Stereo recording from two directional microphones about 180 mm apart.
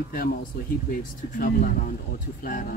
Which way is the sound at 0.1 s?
55° left (ahead or behind).